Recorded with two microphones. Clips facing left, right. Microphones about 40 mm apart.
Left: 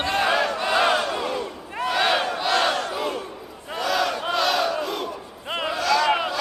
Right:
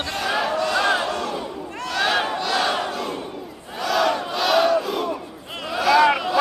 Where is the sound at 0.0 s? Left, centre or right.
Left.